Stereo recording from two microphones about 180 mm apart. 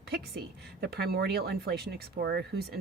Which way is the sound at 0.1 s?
60° right (ahead or behind).